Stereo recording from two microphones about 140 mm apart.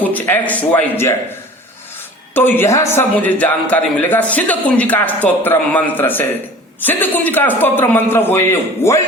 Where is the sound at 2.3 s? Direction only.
15° left (ahead or behind).